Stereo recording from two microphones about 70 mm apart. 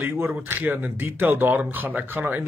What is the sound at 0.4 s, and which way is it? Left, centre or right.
Speech, right.